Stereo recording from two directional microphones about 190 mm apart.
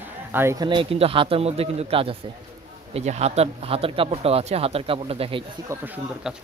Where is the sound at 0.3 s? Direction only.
15° right (ahead or behind).